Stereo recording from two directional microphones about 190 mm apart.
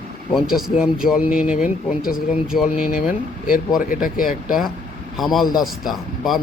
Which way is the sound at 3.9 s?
45° left (ahead or behind).